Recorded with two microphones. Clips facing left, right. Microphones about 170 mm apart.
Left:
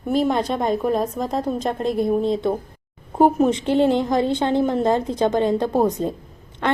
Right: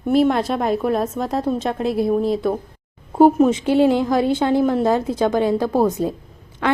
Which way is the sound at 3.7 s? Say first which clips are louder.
Right 2 dB; 10° right (ahead or behind).